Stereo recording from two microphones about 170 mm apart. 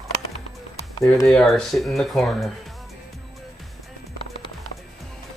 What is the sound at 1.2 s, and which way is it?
Speech, 5° left (ahead or behind).